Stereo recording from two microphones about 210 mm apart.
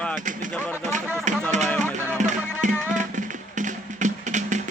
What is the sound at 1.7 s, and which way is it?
Music, 5° left (ahead or behind).